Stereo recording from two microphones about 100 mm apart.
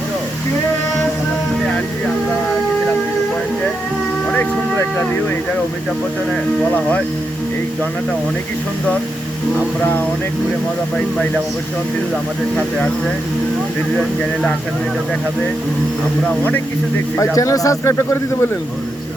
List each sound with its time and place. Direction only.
17.3 s speech: 35° left (ahead or behind)